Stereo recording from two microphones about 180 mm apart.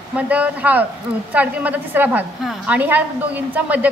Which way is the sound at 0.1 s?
10° right (ahead or behind).